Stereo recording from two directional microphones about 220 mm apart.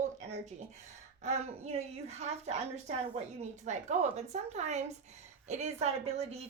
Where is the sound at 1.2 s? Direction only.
30° right (ahead or behind).